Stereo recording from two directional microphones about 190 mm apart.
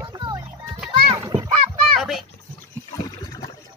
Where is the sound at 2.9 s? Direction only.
20° left (ahead or behind).